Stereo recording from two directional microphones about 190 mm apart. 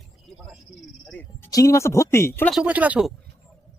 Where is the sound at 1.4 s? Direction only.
20° left (ahead or behind).